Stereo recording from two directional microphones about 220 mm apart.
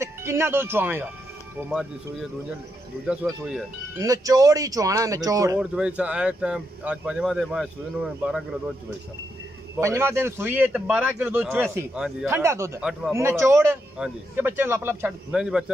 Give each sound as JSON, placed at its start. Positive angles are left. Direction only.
{"t": 0.0, "sound": "speech", "side_deg": -10}
{"t": 4.0, "sound": "a man's voice", "side_deg": -15}
{"t": 5.6, "sound": "speech", "side_deg": -5}
{"t": 9.8, "sound": "a man's voice", "side_deg": -10}